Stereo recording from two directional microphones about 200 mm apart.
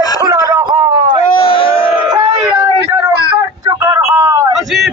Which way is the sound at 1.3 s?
25° left (ahead or behind).